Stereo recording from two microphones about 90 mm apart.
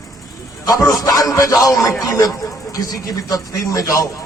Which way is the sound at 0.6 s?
40° left (ahead or behind).